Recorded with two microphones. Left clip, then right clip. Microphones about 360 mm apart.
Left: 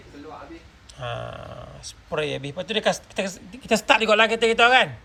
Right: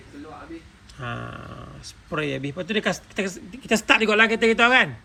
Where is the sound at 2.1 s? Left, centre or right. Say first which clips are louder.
Left 1 dB; left.